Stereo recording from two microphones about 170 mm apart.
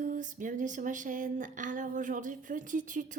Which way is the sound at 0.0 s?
50° right (ahead or behind).